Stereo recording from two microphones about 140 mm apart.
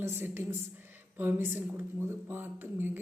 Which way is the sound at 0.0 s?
15° right (ahead or behind).